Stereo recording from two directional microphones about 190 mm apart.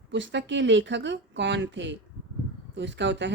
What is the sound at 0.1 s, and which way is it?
A woman's voice, 70° right (ahead or behind).